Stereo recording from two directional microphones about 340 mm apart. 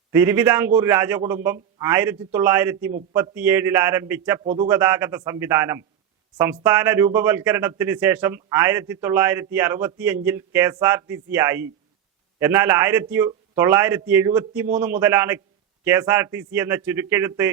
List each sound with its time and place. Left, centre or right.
0.1 s a man's voice: centre
4.4 s speech: centre
4.7 s a man's voice: centre